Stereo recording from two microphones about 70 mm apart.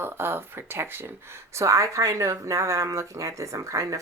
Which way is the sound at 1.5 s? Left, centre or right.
Right.